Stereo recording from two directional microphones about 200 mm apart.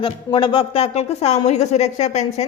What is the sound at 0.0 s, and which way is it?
Speech, 25° left (ahead or behind).